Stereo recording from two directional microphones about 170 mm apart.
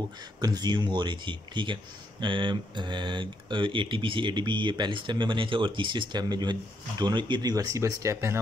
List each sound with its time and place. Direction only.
0.4 s speech: 25° right (ahead or behind)